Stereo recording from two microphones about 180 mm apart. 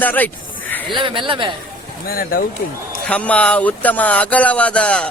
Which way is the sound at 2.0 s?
55° left (ahead or behind).